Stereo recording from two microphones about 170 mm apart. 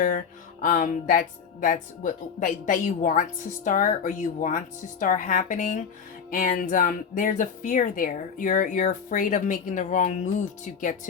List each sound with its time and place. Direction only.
0.6 s speech: 50° left (ahead or behind)